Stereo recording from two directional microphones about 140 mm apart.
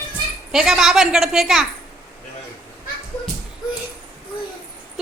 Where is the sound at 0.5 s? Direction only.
5° right (ahead or behind).